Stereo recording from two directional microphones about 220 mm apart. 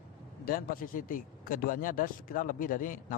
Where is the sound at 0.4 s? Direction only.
40° left (ahead or behind).